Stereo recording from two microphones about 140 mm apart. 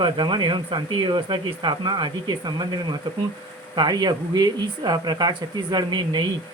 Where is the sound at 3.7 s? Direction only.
30° right (ahead or behind).